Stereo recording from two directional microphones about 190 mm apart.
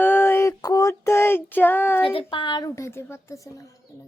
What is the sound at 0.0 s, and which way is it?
Female singing, 10° left (ahead or behind).